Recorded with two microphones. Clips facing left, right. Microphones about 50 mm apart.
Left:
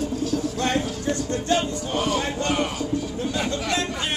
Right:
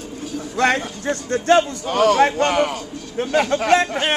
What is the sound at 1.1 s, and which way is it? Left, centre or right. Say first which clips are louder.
A man's voice: right 9 dB; right.